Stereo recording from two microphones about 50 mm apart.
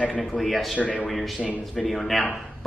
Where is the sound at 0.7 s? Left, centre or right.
Left.